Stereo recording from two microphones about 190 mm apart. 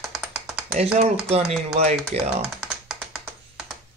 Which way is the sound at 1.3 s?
35° right (ahead or behind).